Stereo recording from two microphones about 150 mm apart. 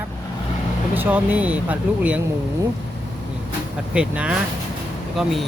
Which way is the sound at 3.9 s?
10° right (ahead or behind).